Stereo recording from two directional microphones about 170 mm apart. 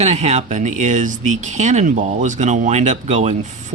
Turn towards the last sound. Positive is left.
turn(degrees=-45)  # may be behind; listen again after turning